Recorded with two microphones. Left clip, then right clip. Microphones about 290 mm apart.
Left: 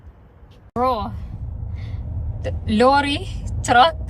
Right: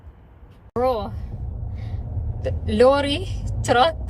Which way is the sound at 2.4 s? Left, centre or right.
Centre.